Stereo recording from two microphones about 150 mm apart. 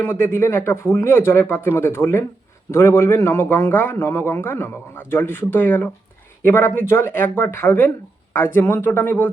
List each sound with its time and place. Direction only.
0.0 s a man's voice: 15° left (ahead or behind)